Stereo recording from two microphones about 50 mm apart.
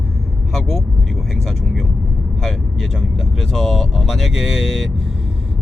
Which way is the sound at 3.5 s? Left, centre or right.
Centre.